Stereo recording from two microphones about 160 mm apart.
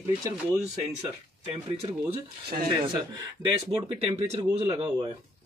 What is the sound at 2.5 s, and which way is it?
Speech, 45° right (ahead or behind).